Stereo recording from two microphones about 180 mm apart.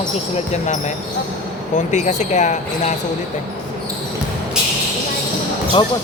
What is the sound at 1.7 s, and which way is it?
Speech, 40° left (ahead or behind).